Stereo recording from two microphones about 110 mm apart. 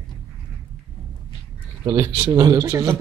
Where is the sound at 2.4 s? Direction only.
35° right (ahead or behind).